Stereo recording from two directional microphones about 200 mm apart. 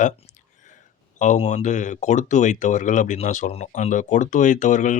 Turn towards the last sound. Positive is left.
turn(degrees=40)  # may be behind; listen again after turning